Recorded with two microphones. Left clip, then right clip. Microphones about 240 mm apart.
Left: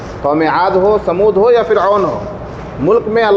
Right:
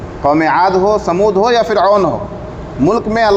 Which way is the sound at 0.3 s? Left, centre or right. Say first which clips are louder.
Right 1 dB; right.